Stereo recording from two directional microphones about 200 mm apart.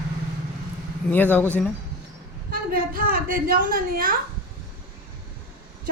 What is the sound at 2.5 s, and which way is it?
A woman's voice, 45° right (ahead or behind).